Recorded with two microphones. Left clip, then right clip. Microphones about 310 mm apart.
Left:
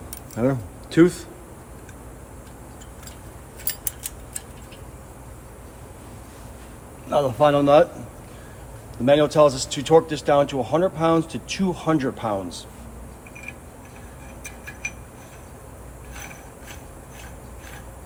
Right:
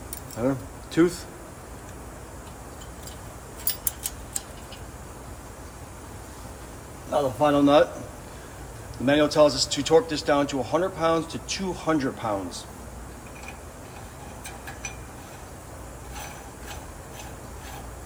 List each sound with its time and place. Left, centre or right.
0.3 s speech: left
7.1 s a man's voice: left
9.0 s a man's voice: left